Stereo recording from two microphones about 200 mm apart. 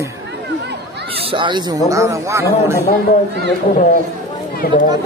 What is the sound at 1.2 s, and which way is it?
A man's voice, 25° right (ahead or behind).